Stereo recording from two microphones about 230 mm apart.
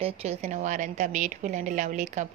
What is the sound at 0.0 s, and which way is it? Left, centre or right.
A woman's voice, right.